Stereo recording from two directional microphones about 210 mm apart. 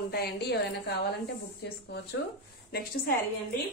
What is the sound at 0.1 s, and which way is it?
A woman's voice, 50° left (ahead or behind).